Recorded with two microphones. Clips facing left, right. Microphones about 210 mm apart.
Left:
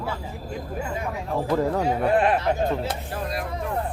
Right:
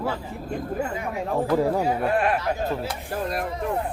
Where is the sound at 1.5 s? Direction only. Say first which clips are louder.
Right 1 dB; 10° right (ahead or behind).